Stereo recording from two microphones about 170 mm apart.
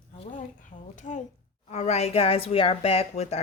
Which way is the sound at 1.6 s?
40° left (ahead or behind).